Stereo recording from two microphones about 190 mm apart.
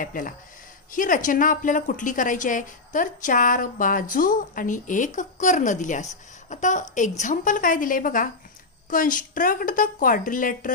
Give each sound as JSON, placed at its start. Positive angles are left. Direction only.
{"t": 0.0, "sound": "a woman's voice", "side_deg": 45}